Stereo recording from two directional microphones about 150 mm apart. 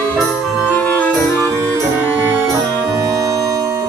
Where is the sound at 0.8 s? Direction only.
10° left (ahead or behind).